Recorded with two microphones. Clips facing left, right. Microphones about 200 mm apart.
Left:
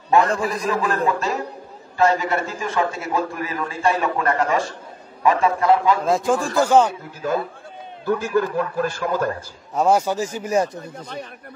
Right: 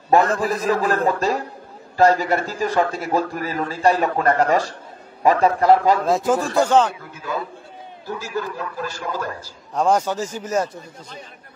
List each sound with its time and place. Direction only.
0.5 s a man's voice: 50° right (ahead or behind)
6.0 s speech: centre (ahead or behind)
8.0 s a man's voice: 55° left (ahead or behind)
9.8 s speech: 10° left (ahead or behind)